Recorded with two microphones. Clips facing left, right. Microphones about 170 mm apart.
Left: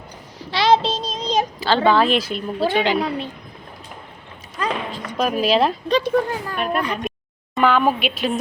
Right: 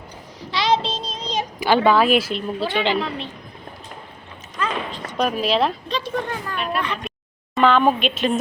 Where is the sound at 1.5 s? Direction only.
15° right (ahead or behind).